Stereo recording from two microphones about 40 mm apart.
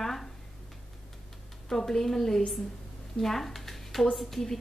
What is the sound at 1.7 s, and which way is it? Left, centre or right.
Speech, centre.